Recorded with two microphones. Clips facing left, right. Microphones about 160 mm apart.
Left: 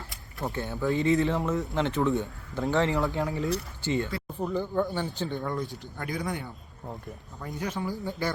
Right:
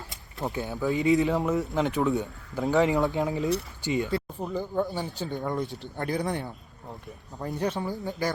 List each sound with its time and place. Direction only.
0.1 s keys jangling: 20° right (ahead or behind)
0.9 s speech: 15° right (ahead or behind)
5.3 s speech: 20° right (ahead or behind)
6.0 s speech: 35° right (ahead or behind)
7.4 s speech: 35° right (ahead or behind)
7.8 s speech: 20° right (ahead or behind)